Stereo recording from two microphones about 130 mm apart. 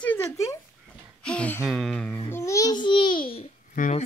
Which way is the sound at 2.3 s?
25° left (ahead or behind).